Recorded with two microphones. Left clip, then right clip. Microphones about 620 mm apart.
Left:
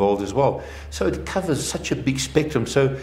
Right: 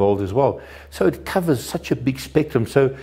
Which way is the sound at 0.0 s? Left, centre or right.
Right.